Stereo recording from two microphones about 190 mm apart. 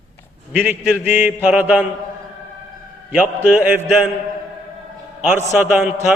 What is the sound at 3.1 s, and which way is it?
A man's voice, 10° right (ahead or behind).